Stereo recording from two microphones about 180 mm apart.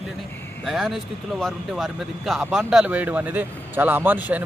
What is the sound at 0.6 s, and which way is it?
Speech, centre (ahead or behind).